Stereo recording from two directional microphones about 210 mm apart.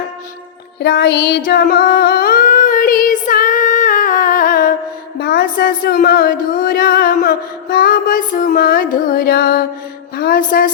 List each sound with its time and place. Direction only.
0.8 s singing: 50° left (ahead or behind)
5.2 s music: 45° left (ahead or behind)
10.2 s a woman's voice: 45° left (ahead or behind)